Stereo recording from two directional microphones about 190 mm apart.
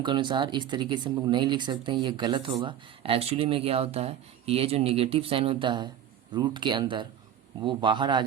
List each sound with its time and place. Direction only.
0.0 s speech: 25° right (ahead or behind)